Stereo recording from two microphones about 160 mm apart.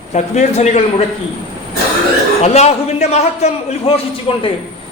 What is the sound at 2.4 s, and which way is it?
A man's voice, 40° left (ahead or behind).